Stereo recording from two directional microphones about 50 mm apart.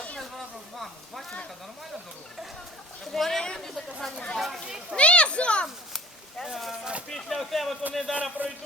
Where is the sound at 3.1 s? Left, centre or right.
Centre.